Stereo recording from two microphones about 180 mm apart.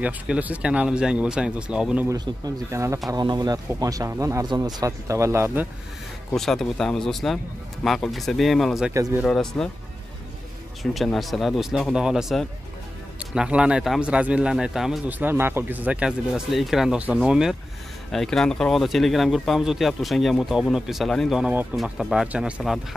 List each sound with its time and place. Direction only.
0.0 s speech: 10° right (ahead or behind)
2.0 s speech: 20° right (ahead or behind)
6.3 s speech: centre (ahead or behind)
8.9 s speech: 15° right (ahead or behind)
9.2 s speech: centre (ahead or behind)
10.8 s speech: centre (ahead or behind)